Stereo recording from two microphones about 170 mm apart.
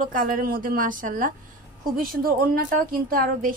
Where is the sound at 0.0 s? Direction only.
55° right (ahead or behind).